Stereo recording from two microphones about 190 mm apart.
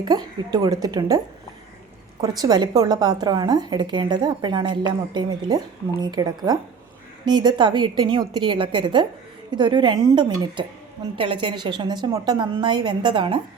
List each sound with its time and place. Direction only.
0.0 s a woman's voice: 20° right (ahead or behind)
2.2 s a woman's voice: 20° right (ahead or behind)